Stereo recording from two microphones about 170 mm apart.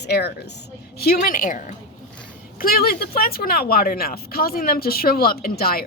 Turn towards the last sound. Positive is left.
turn(degrees=65)  # may be behind; listen again after turning